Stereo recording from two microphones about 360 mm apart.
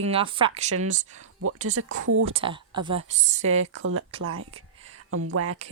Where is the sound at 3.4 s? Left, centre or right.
Right.